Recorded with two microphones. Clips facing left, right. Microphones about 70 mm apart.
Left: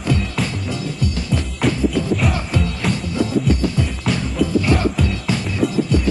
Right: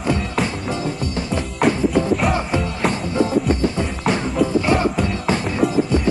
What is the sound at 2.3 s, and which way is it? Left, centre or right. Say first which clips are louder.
Music: right 2 dB; right.